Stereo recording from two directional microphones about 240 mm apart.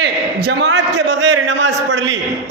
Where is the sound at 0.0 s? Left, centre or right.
Right.